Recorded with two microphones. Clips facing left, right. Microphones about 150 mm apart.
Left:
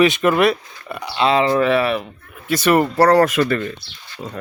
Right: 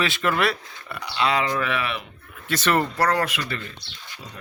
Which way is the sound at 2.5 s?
10° left (ahead or behind).